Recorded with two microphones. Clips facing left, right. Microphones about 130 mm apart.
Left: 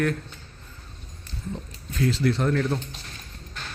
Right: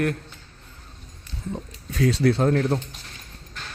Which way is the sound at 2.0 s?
70° right (ahead or behind).